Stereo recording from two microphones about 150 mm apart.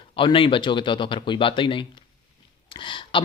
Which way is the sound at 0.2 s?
35° left (ahead or behind).